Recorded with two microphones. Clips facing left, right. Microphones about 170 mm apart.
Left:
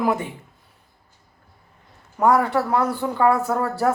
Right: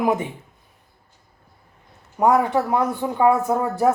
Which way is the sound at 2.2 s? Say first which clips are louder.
Right 1 dB; 15° right (ahead or behind).